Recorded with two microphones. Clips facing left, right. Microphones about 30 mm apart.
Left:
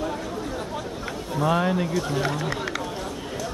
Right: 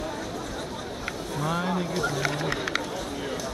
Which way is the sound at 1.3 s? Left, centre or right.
Left.